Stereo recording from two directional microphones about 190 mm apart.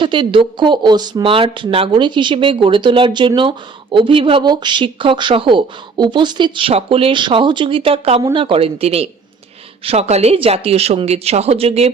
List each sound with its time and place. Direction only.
0.0 s speech: 25° right (ahead or behind)